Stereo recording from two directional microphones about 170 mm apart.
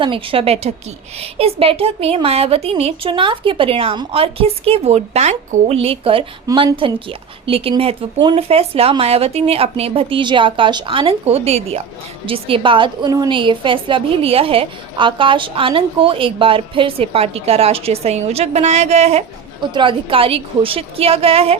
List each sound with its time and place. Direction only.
0.0 s a woman's voice: 30° right (ahead or behind)